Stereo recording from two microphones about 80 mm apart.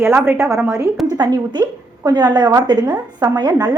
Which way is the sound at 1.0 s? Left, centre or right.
Right.